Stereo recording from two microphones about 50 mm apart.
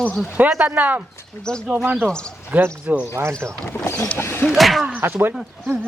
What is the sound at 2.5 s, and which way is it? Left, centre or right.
Speech, right.